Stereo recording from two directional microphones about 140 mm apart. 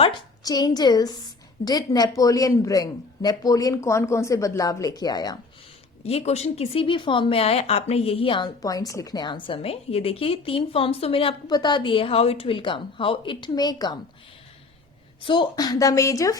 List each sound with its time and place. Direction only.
0.4 s speech: 30° left (ahead or behind)
6.0 s speech: 45° left (ahead or behind)
8.6 s a woman's voice: 25° left (ahead or behind)
15.2 s speech: 35° left (ahead or behind)